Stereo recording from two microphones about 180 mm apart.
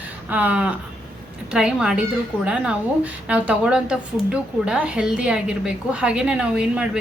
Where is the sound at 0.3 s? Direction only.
10° right (ahead or behind).